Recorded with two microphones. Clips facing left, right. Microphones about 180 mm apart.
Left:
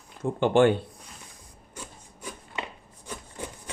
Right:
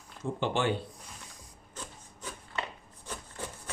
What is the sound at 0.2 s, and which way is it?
Speech, 55° left (ahead or behind).